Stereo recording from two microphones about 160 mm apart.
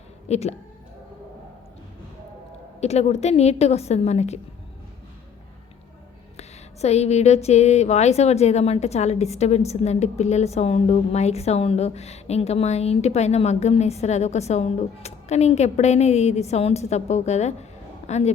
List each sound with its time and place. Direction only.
0.3 s a woman's voice: 40° left (ahead or behind)
2.8 s a woman's voice: 40° left (ahead or behind)
6.8 s a woman's voice: 40° left (ahead or behind)